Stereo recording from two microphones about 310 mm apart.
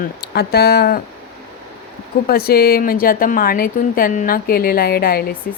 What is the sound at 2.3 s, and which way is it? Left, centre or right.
Speech, left.